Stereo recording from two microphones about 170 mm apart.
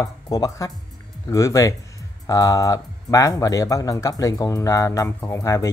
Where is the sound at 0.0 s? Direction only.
20° left (ahead or behind).